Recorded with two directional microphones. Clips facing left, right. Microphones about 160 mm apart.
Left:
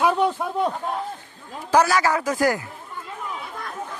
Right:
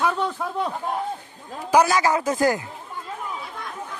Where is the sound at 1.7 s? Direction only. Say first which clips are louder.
Even; 15° right (ahead or behind).